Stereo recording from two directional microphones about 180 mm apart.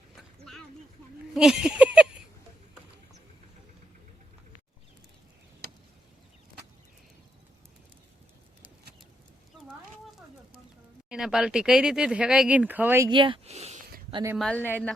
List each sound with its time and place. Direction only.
0.2 s a sound: centre (ahead or behind)
11.1 s speech: centre (ahead or behind)
13.1 s speech: 30° right (ahead or behind)
14.3 s speech: 5° left (ahead or behind)